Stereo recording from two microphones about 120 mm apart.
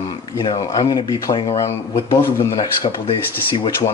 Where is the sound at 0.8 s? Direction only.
35° left (ahead or behind).